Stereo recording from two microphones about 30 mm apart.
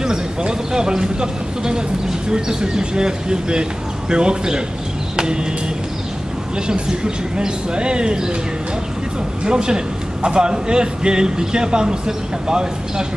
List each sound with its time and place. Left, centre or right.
0.5 s speech: right
6.7 s speech: right
9.4 s speech: right